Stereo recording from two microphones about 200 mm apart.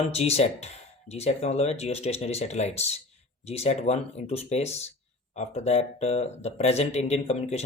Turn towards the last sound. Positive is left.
turn(degrees=30)  # may be behind; listen again after turning